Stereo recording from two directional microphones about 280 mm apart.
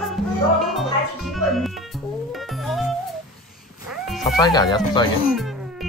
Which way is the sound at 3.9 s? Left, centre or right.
Centre.